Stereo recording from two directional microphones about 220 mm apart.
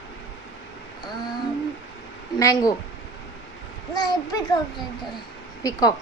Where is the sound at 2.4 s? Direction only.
15° left (ahead or behind).